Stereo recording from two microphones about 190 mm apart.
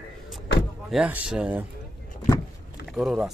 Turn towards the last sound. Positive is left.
turn(degrees=-5)  # may be behind; listen again after turning